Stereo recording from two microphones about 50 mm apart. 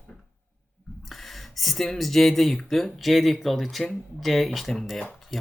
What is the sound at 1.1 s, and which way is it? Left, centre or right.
Speech, centre.